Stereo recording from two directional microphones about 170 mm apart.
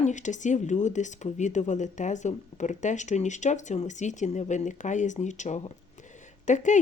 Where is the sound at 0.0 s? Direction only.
45° left (ahead or behind).